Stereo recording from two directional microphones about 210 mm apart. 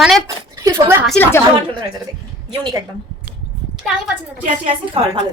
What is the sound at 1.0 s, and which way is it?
Speech, 5° left (ahead or behind).